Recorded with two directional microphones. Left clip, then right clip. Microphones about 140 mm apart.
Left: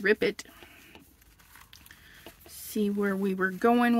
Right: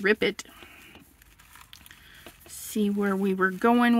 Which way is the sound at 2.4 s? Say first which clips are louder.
Right 2 dB; 15° right (ahead or behind).